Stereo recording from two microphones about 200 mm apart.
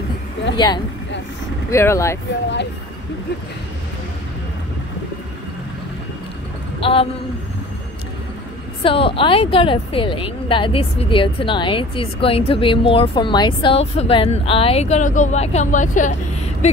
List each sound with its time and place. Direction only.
0.6 s a woman's voice: 20° left (ahead or behind)
6.8 s a woman's voice: 25° left (ahead or behind)
8.8 s a woman's voice: 25° left (ahead or behind)